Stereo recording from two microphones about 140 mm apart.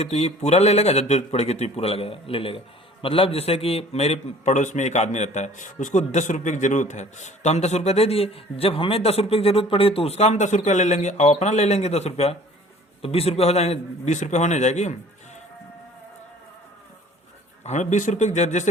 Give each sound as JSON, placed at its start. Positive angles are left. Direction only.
{"t": 0.0, "sound": "a man's voice", "side_deg": 50}
{"t": 17.6, "sound": "speech", "side_deg": 55}